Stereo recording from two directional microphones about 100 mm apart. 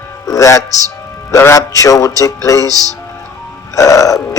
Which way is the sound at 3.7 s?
35° left (ahead or behind).